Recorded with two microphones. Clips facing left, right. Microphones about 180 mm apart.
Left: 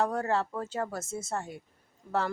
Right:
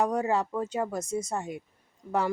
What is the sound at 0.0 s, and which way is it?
Speech, 15° right (ahead or behind).